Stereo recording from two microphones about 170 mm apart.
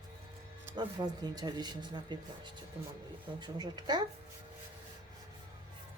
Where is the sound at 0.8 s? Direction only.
25° right (ahead or behind).